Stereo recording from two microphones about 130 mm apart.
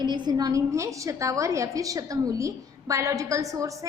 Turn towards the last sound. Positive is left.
turn(degrees=-25)  # may be behind; listen again after turning